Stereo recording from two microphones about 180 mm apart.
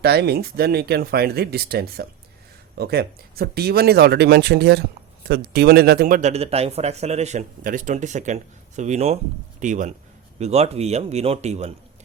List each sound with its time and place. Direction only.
0.0 s a man's voice: 65° right (ahead or behind); by 11.7 s 35° right (ahead or behind)